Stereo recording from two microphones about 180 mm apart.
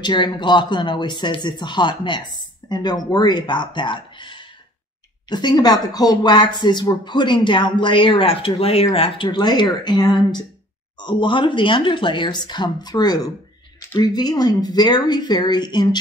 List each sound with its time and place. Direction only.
0.0 s speech: 25° left (ahead or behind)